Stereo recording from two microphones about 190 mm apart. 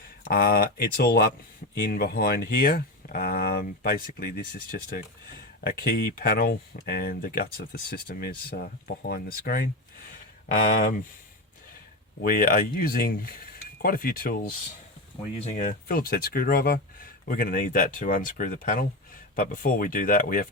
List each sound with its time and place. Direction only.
0.3 s speech: 50° left (ahead or behind)
12.2 s speech: 50° left (ahead or behind)
15.4 s speech: 35° left (ahead or behind)